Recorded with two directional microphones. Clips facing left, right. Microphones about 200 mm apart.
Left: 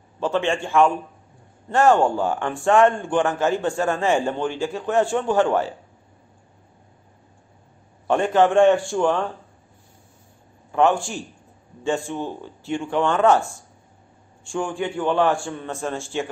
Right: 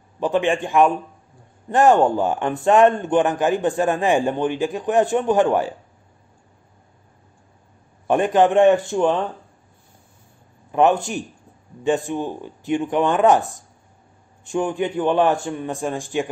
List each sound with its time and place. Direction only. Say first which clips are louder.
0.2 s a man's voice: right 3 dB; 15° right (ahead or behind)
8.1 s a man's voice: right 1 dB; 15° right (ahead or behind)
10.7 s a man's voice: right 2 dB; 20° right (ahead or behind)